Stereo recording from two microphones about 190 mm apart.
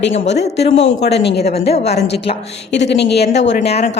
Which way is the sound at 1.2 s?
60° left (ahead or behind).